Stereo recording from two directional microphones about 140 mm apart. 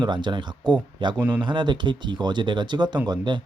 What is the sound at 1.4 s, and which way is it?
Speech, 35° right (ahead or behind).